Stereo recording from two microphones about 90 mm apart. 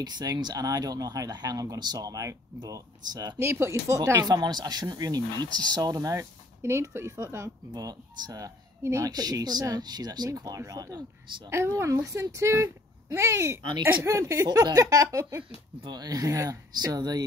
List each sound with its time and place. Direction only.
0.0 s speech: 50° right (ahead or behind)
3.3 s a child's voice: 30° right (ahead or behind)
4.2 s speech: 50° right (ahead or behind); by 7.5 s 30° right (ahead or behind)
7.7 s speech: 45° right (ahead or behind)
9.1 s a child's voice: 50° right (ahead or behind); by 15.4 s 30° right (ahead or behind)
15.9 s speech: 45° right (ahead or behind)